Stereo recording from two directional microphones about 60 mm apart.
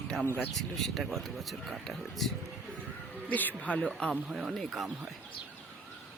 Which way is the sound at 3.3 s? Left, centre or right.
Left.